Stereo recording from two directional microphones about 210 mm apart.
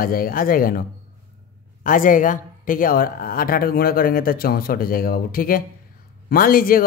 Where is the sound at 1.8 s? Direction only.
40° left (ahead or behind).